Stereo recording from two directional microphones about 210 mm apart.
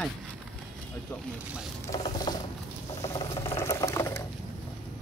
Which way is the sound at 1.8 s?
20° left (ahead or behind).